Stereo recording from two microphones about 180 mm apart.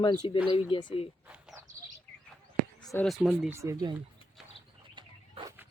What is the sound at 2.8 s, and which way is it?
Speech, centre (ahead or behind).